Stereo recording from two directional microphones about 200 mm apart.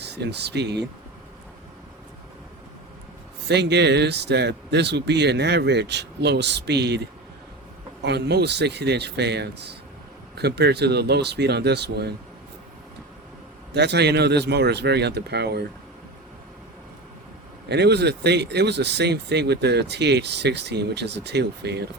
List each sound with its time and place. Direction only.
0.0 s speech: 55° right (ahead or behind)
3.5 s speech: 60° right (ahead or behind)
13.7 s speech: 55° right (ahead or behind)
17.7 s speech: 55° right (ahead or behind)